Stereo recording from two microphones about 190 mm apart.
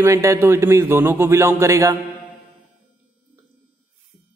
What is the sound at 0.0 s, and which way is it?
A man's voice, 15° right (ahead or behind).